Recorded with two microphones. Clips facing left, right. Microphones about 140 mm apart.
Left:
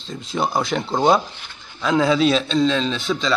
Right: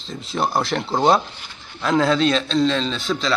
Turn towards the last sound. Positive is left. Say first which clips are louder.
# left 1 dB
turn(degrees=0)  # may be behind; listen again after turning